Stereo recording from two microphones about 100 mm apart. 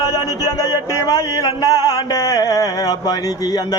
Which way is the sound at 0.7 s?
35° left (ahead or behind).